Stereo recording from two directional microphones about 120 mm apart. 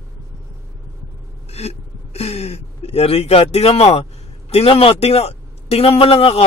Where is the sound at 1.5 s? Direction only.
60° left (ahead or behind).